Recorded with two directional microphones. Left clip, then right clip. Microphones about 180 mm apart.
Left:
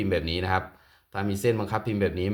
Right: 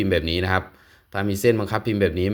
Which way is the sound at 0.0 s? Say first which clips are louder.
Right 5 dB; 30° right (ahead or behind).